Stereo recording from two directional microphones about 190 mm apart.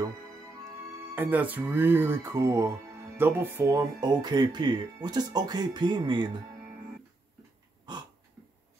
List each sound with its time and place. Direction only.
1.1 s speech: 10° right (ahead or behind)